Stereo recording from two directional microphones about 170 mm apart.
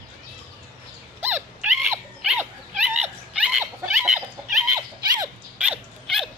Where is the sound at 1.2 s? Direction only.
10° right (ahead or behind).